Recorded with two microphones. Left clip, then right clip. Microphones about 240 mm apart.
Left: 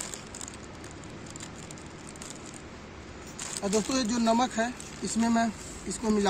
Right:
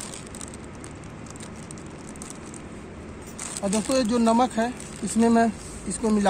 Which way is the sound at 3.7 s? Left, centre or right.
Centre.